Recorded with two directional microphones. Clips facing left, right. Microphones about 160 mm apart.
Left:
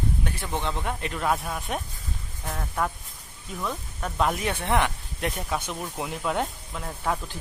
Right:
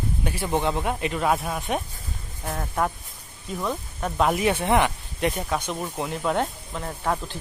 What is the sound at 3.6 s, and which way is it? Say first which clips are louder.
Speech: right 3 dB; 25° right (ahead or behind).